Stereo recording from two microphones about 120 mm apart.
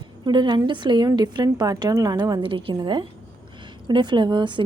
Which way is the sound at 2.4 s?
50° right (ahead or behind).